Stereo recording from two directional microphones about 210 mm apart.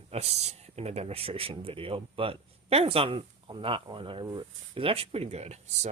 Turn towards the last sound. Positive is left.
turn(degrees=-30)  # may be behind; listen again after turning